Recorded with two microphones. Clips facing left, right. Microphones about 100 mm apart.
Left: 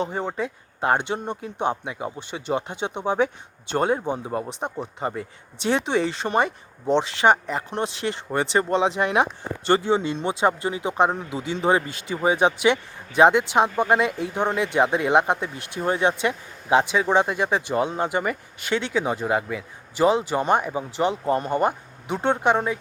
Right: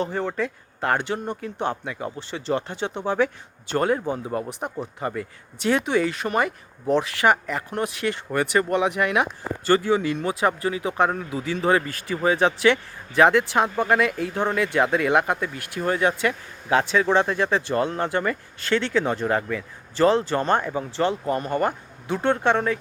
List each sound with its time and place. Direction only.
0.0 s speech: 20° left (ahead or behind)